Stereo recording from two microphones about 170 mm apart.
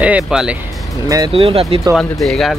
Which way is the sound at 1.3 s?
35° right (ahead or behind).